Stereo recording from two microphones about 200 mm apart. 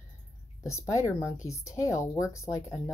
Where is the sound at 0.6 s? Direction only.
15° left (ahead or behind).